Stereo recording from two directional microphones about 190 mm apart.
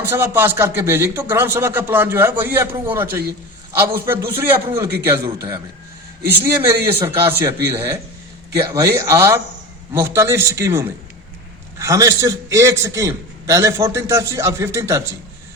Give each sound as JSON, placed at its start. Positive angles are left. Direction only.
{"t": 0.0, "sound": "a man's voice", "side_deg": -10}